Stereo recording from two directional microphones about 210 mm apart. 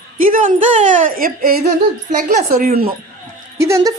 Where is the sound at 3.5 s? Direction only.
15° right (ahead or behind).